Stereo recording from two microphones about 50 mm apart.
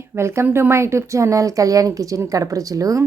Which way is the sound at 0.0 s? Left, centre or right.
Right.